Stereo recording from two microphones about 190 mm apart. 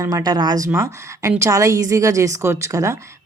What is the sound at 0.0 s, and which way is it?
Speech, 20° right (ahead or behind).